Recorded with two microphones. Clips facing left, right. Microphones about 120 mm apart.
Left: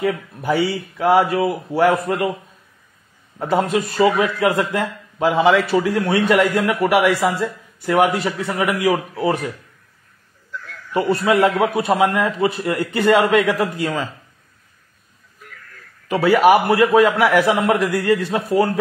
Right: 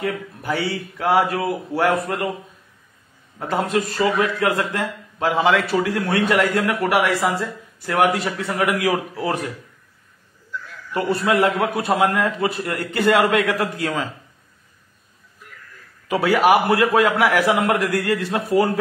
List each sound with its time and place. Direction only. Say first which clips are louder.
0.5 s a man's voice: left 5 dB; 5° left (ahead or behind)
3.3 s a man's voice: left 3 dB; centre (ahead or behind)
4.0 s a man's voice: left 5 dB; 15° left (ahead or behind)
4.7 s a man's voice: left 3 dB; 5° left (ahead or behind)
10.6 s a sound: left 4 dB; centre (ahead or behind)
11.2 s a man's voice: left 2 dB; centre (ahead or behind)
16.1 s a man's voice: left 3 dB; centre (ahead or behind)